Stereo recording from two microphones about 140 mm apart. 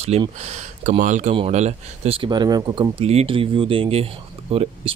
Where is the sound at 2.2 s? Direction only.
30° right (ahead or behind).